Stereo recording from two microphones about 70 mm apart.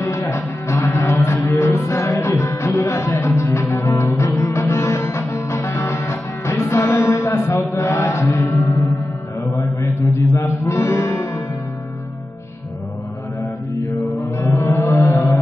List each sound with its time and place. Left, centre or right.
0.3 s music: left
7.1 s chant: left
9.6 s music: left
14.3 s music: left